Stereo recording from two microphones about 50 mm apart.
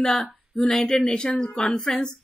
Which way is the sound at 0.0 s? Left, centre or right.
Centre.